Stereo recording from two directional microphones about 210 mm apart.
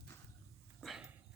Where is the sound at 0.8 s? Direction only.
Centre (ahead or behind).